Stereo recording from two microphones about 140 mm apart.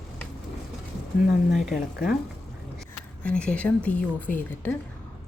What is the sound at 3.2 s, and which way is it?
A woman's voice, 10° left (ahead or behind).